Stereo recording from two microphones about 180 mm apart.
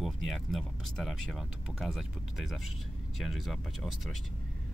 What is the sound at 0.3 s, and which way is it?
Speech, centre (ahead or behind).